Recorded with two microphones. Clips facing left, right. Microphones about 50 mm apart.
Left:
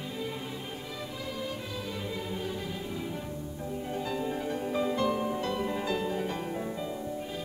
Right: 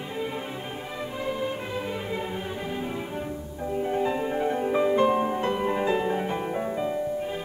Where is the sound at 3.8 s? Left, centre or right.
Right.